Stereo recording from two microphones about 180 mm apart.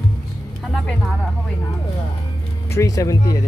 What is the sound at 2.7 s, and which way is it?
Speech, 15° left (ahead or behind).